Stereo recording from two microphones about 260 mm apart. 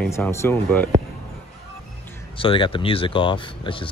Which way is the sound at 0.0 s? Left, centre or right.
Centre.